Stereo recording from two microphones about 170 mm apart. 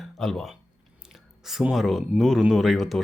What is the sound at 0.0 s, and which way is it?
Speech, centre (ahead or behind).